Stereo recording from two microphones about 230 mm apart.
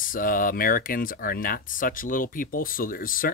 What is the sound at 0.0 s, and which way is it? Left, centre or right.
Speech, left.